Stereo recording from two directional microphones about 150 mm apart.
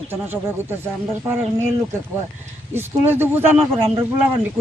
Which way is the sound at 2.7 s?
15° right (ahead or behind).